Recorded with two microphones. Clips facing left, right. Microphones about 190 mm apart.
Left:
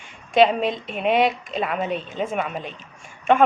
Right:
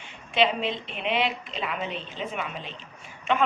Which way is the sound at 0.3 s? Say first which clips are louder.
Left 7 dB; 45° left (ahead or behind).